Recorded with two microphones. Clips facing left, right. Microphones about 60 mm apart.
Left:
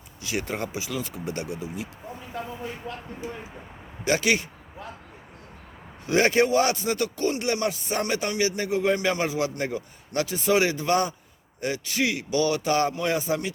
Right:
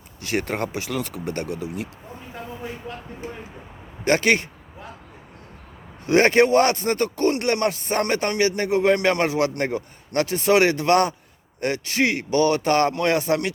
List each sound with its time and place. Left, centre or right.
0.2 s speech: right
2.9 s speech: centre
3.2 s speech: right
6.1 s speech: right